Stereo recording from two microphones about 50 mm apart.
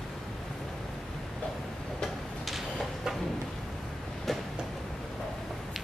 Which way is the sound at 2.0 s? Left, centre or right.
Centre.